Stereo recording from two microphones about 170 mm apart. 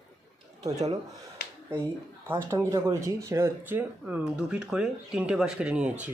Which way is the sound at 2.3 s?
15° right (ahead or behind).